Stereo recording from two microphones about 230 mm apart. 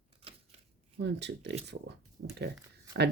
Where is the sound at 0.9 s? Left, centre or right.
Right.